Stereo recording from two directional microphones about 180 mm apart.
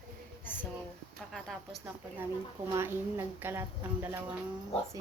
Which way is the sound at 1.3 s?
Centre (ahead or behind).